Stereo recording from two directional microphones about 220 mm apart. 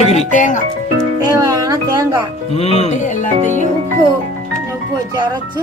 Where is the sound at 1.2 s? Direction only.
15° right (ahead or behind).